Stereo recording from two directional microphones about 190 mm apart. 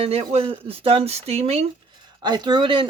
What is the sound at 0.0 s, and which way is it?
Speech, 30° right (ahead or behind).